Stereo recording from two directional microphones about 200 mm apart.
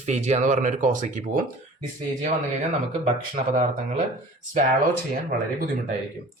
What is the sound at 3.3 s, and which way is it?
Speech, 40° right (ahead or behind).